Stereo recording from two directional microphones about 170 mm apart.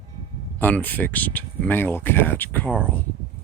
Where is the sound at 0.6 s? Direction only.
10° left (ahead or behind).